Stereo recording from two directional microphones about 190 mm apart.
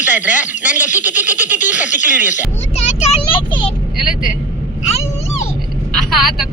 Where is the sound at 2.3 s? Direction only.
35° left (ahead or behind).